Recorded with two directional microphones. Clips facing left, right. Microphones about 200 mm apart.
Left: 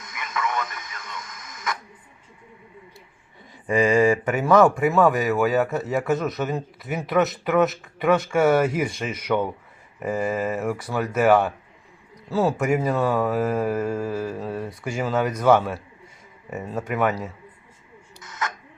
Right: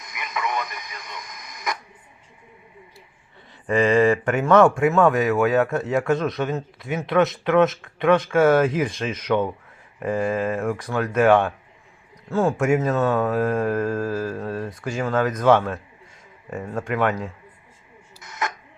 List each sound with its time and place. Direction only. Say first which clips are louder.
0.0 s radio: even; 15° right (ahead or behind)
3.7 s speech: right 1 dB; 10° left (ahead or behind)